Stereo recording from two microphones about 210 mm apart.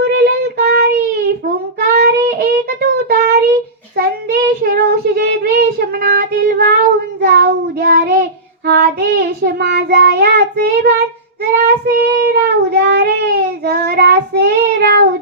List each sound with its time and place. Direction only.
0.0 s child singing: 50° right (ahead or behind)
1.9 s child singing: 45° right (ahead or behind)